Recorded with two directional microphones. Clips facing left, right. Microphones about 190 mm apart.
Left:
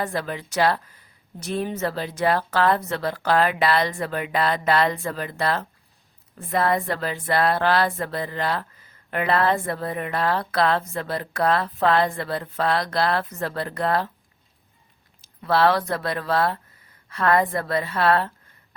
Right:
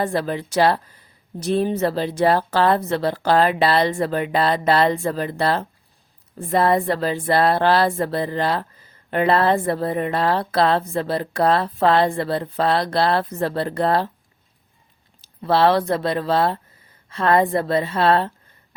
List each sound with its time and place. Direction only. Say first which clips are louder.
0.0 s a woman's voice: right 5 dB; 30° right (ahead or behind)
15.2 s speech: right 3 dB; 30° right (ahead or behind)